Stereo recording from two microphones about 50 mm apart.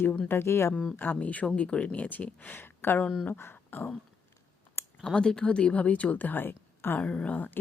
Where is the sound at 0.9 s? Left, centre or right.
Left.